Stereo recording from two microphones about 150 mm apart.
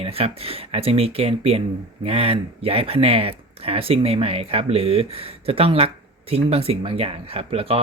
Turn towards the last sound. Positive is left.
turn(degrees=-40)  # may be behind; listen again after turning